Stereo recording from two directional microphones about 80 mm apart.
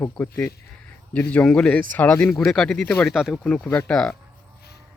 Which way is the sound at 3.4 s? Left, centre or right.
Centre.